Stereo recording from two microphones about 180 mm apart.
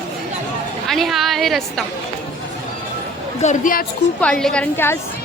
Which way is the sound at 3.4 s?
45° left (ahead or behind).